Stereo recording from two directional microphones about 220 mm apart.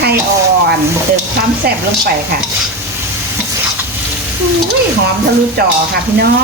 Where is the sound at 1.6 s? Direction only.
45° right (ahead or behind).